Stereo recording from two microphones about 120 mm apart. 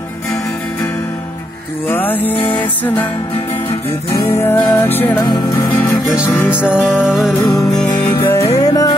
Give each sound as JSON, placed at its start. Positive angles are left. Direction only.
{"t": 1.9, "sound": "music", "side_deg": 15}
{"t": 4.1, "sound": "music", "side_deg": 20}
{"t": 5.2, "sound": "music", "side_deg": 35}
{"t": 6.2, "sound": "music", "side_deg": 15}
{"t": 6.9, "sound": "music", "side_deg": -5}
{"t": 8.0, "sound": "music", "side_deg": 20}
{"t": 8.5, "sound": "music", "side_deg": 30}